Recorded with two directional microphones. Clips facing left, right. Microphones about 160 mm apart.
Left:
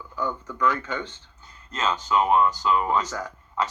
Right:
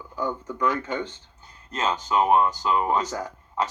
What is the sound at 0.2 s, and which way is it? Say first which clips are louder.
Speech: even; 15° right (ahead or behind).